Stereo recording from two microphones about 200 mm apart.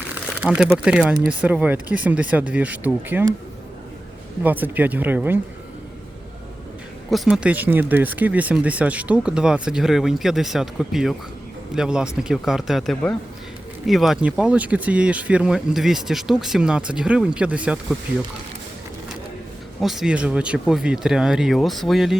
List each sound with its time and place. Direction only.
0.1 s speech: 5° right (ahead or behind)
4.4 s speech: 10° right (ahead or behind)
7.1 s speech: 5° right (ahead or behind)
19.8 s speech: centre (ahead or behind)